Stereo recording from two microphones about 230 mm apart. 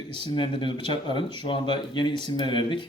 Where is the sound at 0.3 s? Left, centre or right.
Left.